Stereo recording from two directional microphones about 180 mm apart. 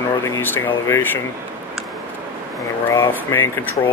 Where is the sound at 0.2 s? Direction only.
15° left (ahead or behind).